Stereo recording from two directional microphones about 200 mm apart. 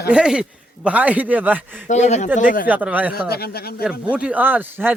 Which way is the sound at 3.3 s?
50° left (ahead or behind).